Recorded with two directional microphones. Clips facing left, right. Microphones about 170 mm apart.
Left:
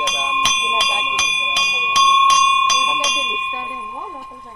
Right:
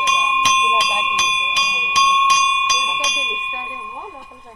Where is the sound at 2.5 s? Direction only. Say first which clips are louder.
Left 3 dB; 90° left.